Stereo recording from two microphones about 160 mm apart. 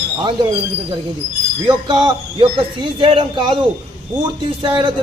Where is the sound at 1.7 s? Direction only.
30° right (ahead or behind).